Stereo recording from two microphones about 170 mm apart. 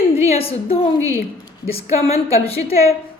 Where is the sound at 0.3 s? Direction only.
35° left (ahead or behind).